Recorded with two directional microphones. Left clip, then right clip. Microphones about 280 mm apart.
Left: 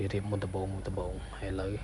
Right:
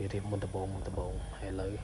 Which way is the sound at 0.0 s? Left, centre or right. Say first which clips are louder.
Left 3 dB; centre.